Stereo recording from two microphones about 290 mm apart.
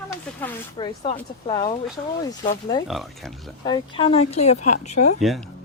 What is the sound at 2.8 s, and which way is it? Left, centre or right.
Speech, centre.